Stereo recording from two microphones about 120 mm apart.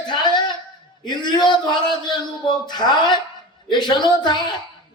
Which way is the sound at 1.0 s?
40° left (ahead or behind).